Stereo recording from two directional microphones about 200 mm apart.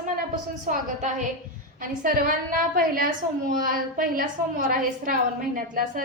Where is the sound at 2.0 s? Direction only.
45° right (ahead or behind).